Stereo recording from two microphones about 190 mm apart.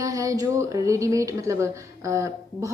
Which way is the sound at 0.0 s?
15° right (ahead or behind).